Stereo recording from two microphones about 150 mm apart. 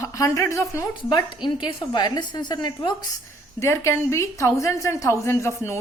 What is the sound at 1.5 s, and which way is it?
A woman's voice, 30° left (ahead or behind).